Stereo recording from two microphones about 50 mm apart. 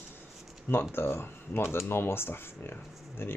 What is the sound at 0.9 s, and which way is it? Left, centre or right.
Speech, left.